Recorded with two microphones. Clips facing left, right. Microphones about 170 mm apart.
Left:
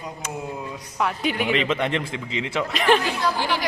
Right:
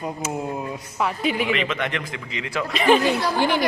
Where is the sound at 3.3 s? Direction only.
55° right (ahead or behind).